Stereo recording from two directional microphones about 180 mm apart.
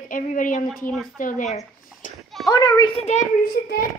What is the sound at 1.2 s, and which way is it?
Speech, 50° left (ahead or behind).